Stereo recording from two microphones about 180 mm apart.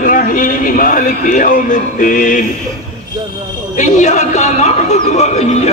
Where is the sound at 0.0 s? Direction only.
50° left (ahead or behind).